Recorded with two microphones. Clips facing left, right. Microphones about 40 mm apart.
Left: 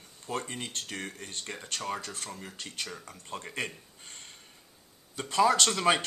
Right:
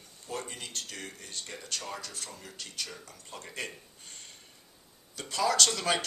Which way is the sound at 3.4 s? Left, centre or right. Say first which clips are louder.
Left 2 dB; left.